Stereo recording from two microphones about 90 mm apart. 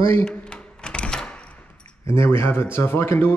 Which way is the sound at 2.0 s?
30° left (ahead or behind).